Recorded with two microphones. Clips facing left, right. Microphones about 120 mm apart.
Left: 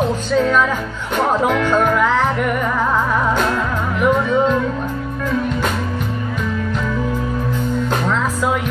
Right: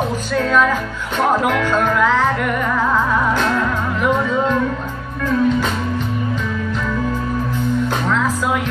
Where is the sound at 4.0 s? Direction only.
20° left (ahead or behind).